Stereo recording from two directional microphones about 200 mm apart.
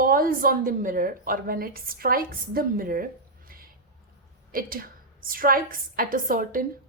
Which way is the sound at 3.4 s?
45° right (ahead or behind).